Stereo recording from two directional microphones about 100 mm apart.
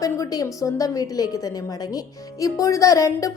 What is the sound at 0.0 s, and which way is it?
Speech, 40° left (ahead or behind).